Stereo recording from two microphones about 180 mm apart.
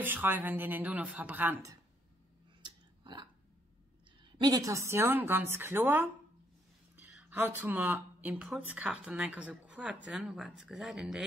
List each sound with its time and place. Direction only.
0.0 s speech: 10° right (ahead or behind)
2.6 s a sound: 25° right (ahead or behind)
4.2 s speech: 25° right (ahead or behind)
7.2 s speech: 10° right (ahead or behind)